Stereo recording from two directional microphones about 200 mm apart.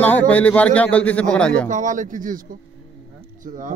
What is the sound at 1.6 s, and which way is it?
Speech, 40° right (ahead or behind).